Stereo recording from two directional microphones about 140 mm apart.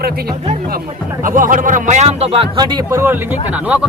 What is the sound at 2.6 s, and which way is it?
Speech, 25° right (ahead or behind).